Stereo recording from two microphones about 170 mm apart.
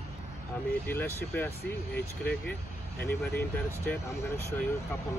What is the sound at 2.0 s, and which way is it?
Speech, 65° left (ahead or behind).